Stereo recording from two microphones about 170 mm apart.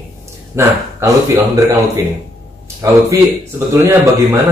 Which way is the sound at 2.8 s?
15° right (ahead or behind).